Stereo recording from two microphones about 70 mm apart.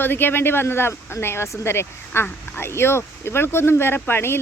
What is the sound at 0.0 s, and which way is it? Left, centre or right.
Speech, left.